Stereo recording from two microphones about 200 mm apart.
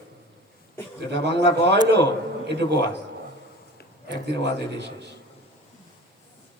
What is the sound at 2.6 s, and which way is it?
Speech, 20° left (ahead or behind).